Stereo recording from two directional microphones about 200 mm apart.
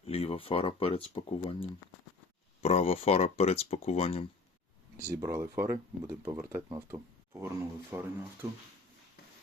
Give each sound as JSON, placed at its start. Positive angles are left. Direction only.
{"t": 0.0, "sound": "speech", "side_deg": 30}
{"t": 4.9, "sound": "speech", "side_deg": -15}